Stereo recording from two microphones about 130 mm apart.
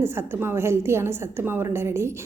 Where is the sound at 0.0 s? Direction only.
20° right (ahead or behind).